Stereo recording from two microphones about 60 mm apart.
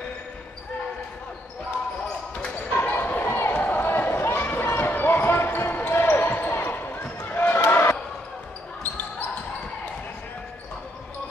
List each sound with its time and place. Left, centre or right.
2.7 s basketball bounce: left